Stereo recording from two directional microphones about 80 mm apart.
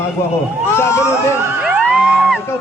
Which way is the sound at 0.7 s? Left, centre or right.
Left.